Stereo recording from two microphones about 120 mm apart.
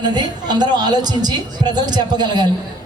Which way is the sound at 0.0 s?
35° right (ahead or behind).